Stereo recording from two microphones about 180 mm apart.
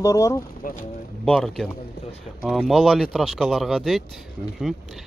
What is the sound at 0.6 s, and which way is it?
Speech, 50° left (ahead or behind).